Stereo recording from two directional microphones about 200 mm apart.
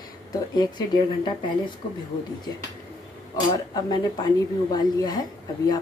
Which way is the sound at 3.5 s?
20° left (ahead or behind).